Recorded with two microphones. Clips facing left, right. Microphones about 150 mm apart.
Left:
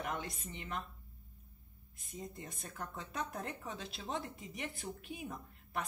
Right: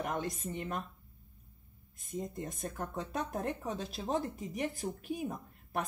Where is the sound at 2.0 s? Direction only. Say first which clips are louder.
Right 8 dB; 45° right (ahead or behind).